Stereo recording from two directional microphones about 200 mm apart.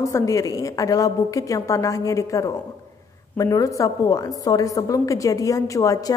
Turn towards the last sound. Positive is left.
turn(degrees=15)  # may be behind; listen again after turning